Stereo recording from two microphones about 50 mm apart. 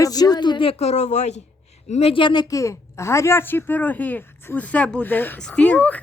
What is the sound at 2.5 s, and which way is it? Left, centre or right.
A woman's voice, left.